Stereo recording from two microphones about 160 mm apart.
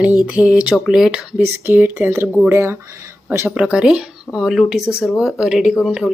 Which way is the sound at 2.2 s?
Centre (ahead or behind).